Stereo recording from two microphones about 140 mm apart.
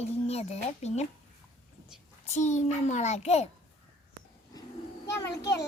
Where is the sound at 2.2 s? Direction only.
55° left (ahead or behind).